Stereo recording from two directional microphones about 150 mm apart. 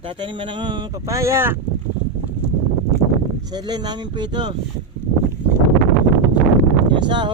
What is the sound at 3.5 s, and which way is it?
Speech, 30° right (ahead or behind).